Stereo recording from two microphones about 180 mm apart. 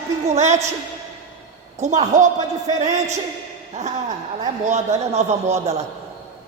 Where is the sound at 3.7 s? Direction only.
40° right (ahead or behind).